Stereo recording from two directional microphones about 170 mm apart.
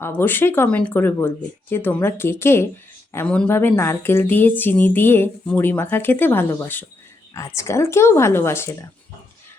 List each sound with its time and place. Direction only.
0.0 s a woman's voice: 10° left (ahead or behind)